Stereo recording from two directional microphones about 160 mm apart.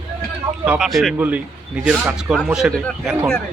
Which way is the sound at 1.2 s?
10° right (ahead or behind).